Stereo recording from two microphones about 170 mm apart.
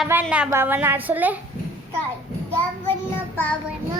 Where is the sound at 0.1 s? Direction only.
10° right (ahead or behind).